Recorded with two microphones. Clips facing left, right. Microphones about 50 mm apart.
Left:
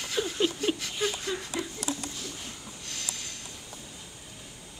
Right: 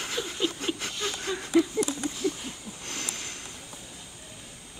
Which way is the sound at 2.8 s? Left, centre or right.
Right.